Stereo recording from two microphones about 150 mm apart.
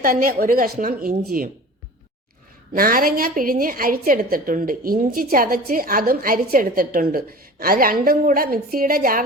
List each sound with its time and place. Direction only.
0.0 s a woman's voice: 70° right (ahead or behind)
2.7 s a woman's voice: 75° right (ahead or behind)